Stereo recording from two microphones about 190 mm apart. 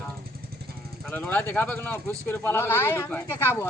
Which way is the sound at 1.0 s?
10° left (ahead or behind).